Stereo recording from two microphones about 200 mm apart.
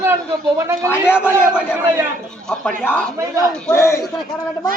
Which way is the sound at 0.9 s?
10° left (ahead or behind).